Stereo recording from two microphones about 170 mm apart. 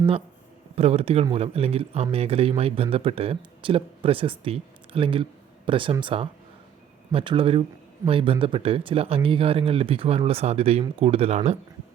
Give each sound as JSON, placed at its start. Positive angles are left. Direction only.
{"t": 0.8, "sound": "speech", "side_deg": -35}